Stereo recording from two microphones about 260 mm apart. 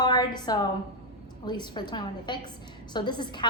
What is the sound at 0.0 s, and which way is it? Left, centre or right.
A woman's voice, centre.